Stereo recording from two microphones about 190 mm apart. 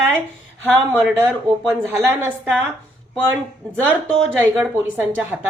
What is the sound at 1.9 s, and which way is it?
Speech, 10° right (ahead or behind).